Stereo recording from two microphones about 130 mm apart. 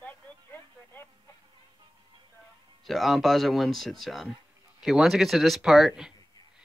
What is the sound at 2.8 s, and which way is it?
Speech, centre (ahead or behind).